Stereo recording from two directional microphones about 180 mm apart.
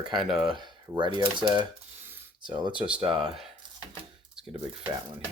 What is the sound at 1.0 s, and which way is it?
Speech, 25° right (ahead or behind).